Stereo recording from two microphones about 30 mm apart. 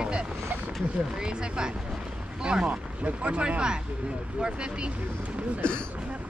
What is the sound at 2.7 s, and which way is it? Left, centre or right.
Speech, right.